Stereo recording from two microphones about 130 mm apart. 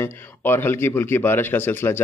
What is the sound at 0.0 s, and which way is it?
A man's voice, 15° left (ahead or behind).